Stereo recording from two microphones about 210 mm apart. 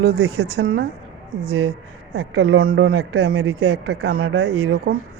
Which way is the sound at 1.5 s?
90° right.